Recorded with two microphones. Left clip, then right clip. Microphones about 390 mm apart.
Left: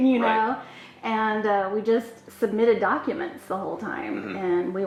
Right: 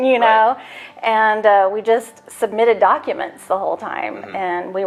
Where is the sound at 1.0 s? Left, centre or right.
Right.